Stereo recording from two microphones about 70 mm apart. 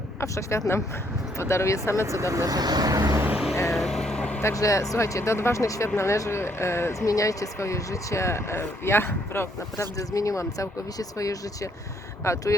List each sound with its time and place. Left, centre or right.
0.2 s speech: left
2.0 s speech: right
3.3 s vehicle: centre
4.4 s speech: left
7.0 s speech: left